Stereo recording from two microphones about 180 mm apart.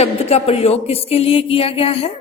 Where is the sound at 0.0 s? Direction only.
35° left (ahead or behind).